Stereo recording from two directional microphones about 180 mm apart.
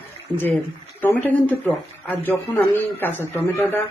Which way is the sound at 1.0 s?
10° left (ahead or behind).